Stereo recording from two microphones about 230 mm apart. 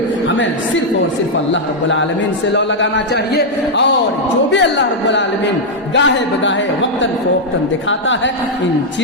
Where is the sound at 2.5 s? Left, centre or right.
Left.